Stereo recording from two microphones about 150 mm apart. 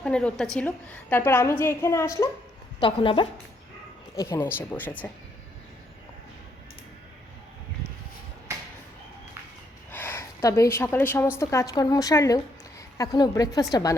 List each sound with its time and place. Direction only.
0.0 s a woman's voice: 5° left (ahead or behind)
2.8 s a woman's voice: 35° left (ahead or behind)
4.2 s a woman's voice: 15° left (ahead or behind)
8.5 s a sound: 20° right (ahead or behind)
9.9 s a woman's voice: 15° left (ahead or behind)